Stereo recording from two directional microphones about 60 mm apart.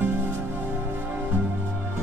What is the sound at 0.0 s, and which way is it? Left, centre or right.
Music, right.